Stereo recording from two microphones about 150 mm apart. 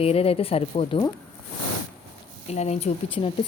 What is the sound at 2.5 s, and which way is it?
Speech, 45° left (ahead or behind).